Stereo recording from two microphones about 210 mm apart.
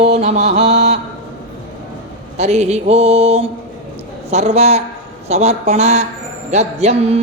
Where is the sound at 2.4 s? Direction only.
30° right (ahead or behind).